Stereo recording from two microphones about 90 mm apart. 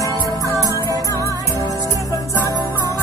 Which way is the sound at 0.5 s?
40° right (ahead or behind).